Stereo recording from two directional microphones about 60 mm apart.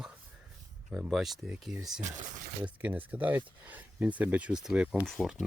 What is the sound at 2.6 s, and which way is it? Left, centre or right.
Speech, right.